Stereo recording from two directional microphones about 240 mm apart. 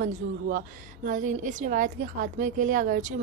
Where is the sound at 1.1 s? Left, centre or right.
Right.